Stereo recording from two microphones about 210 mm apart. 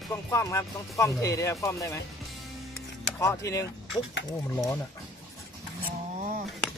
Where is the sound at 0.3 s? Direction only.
15° left (ahead or behind).